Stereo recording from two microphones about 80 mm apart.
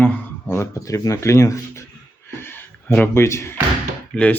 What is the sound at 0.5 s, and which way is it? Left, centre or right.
Speech, left.